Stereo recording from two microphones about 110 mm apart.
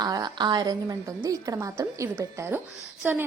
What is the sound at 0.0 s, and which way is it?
A woman's voice, 40° right (ahead or behind).